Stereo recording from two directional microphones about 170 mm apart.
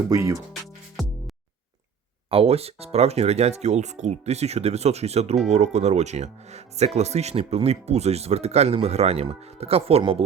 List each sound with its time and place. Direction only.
0.1 s speech: 20° right (ahead or behind)
2.3 s speech: 35° right (ahead or behind)